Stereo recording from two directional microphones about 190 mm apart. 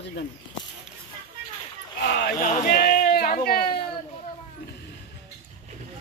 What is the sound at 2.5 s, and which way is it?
Sheep, 50° left (ahead or behind).